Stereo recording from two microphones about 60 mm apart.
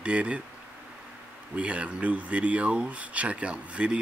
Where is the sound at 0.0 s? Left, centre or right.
Right.